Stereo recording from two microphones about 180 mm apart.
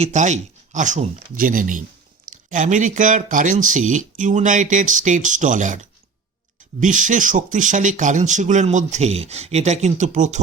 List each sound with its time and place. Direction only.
0.0 s speech: 40° right (ahead or behind)